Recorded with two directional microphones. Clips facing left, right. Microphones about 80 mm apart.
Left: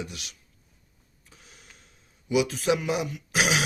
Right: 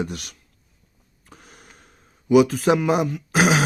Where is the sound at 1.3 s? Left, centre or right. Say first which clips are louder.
Right 7 dB; right.